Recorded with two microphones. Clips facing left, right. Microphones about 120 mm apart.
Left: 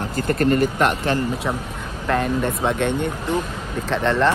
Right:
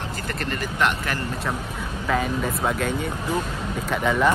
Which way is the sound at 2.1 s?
Centre (ahead or behind).